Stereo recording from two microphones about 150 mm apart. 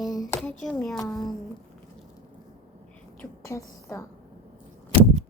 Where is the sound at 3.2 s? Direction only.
20° left (ahead or behind).